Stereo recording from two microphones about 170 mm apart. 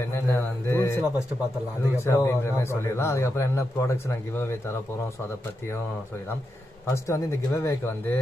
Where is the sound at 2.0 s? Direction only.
15° left (ahead or behind).